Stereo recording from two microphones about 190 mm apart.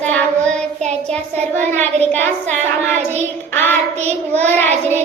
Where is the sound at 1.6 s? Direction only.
10° left (ahead or behind).